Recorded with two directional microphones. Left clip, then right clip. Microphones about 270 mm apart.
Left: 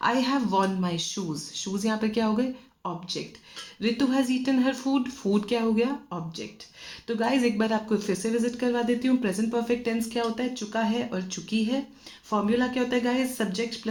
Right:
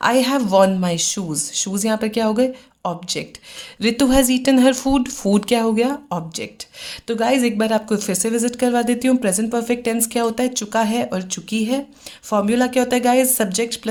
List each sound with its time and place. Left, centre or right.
0.0 s speech: right